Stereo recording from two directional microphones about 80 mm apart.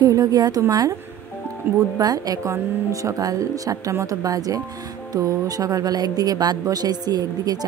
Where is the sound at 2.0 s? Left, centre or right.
Right.